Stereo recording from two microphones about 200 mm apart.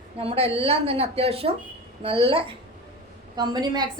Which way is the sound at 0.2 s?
30° right (ahead or behind).